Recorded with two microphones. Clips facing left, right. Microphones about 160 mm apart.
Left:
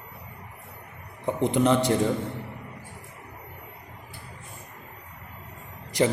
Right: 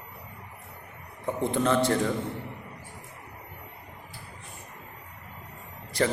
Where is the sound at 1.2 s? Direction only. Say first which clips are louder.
Left 4 dB; 20° left (ahead or behind).